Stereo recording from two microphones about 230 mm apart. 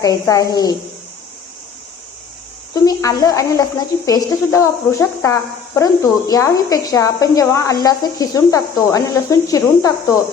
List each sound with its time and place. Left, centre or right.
0.0 s a woman's voice: centre
2.7 s a woman's voice: centre